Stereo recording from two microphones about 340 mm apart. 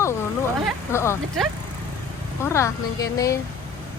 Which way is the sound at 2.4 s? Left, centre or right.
Centre.